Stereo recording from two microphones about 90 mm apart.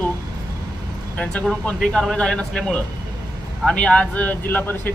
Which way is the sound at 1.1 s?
15° left (ahead or behind).